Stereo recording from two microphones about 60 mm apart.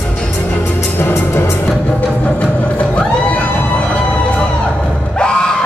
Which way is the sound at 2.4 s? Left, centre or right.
Left.